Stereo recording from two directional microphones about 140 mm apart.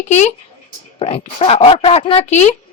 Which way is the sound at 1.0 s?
45° left (ahead or behind).